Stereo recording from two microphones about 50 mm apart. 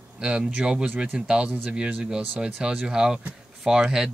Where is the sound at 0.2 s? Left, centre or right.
Centre.